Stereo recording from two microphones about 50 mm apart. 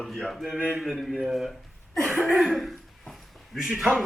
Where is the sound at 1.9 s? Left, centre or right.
Centre.